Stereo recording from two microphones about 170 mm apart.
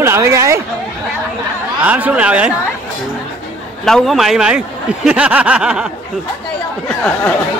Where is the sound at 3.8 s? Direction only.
Centre (ahead or behind).